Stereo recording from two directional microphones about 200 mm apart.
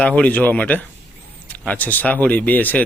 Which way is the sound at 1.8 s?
10° left (ahead or behind).